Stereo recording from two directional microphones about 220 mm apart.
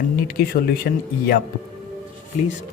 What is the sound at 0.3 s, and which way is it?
Speech, 45° left (ahead or behind).